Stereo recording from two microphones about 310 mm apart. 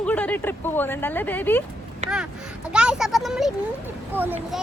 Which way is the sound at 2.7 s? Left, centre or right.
Centre.